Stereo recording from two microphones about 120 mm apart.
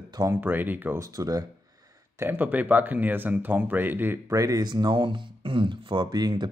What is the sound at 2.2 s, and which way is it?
Speech, 15° right (ahead or behind).